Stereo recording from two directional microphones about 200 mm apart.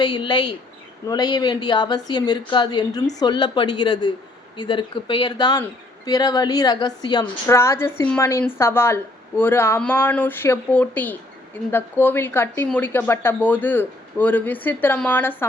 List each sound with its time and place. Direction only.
0.0 s speech: 20° left (ahead or behind)